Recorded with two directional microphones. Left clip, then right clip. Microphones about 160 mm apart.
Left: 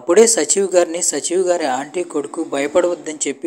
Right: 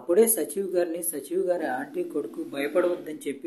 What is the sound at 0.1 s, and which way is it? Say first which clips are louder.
Speech: left 10 dB; 40° left (ahead or behind).